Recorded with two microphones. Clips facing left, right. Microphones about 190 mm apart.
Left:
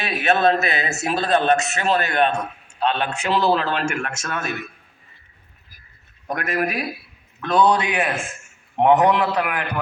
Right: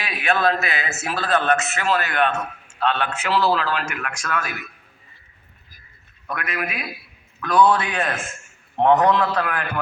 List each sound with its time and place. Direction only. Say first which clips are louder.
0.0 s a man's voice: left 3 dB; 25° left (ahead or behind)
6.2 s a man's voice: left 5 dB; 45° left (ahead or behind)
7.4 s a man's voice: even; 20° left (ahead or behind)